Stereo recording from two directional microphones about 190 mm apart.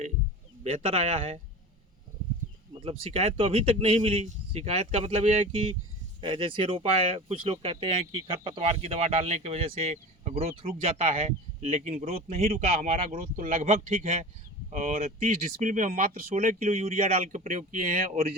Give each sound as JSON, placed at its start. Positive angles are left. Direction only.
{"t": 0.6, "sound": "speech", "side_deg": -35}
{"t": 2.8, "sound": "speech", "side_deg": -30}